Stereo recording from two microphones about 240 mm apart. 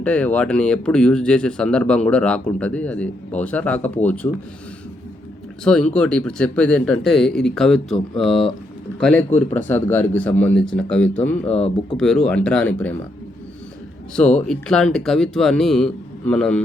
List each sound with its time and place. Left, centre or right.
0.0 s speech: centre
5.6 s speech: centre
11.4 s speech: left
11.9 s speech: centre
14.2 s speech: centre